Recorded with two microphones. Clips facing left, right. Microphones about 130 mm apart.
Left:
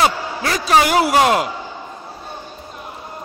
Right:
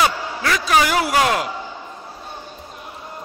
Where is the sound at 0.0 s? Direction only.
30° left (ahead or behind).